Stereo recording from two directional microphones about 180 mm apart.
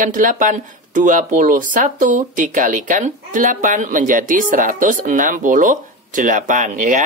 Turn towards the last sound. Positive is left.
turn(degrees=-45)  # may be behind; listen again after turning